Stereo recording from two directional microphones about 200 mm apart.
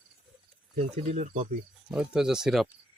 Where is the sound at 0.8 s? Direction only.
35° right (ahead or behind).